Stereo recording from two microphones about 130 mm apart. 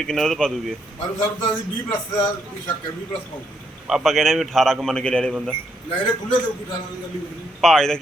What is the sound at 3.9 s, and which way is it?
A man's voice, centre (ahead or behind).